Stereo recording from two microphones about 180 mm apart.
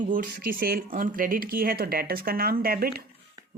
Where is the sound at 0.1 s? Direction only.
50° right (ahead or behind).